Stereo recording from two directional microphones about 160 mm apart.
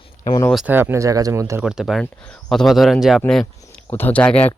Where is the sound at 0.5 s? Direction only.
10° right (ahead or behind).